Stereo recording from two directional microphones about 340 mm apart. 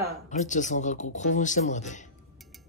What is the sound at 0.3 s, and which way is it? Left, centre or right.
Speech, left.